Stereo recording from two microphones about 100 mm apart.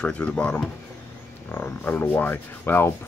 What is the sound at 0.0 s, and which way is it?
Speech, 10° left (ahead or behind).